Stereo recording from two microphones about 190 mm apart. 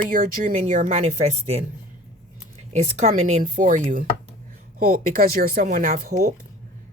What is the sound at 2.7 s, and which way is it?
A woman's voice, 35° right (ahead or behind).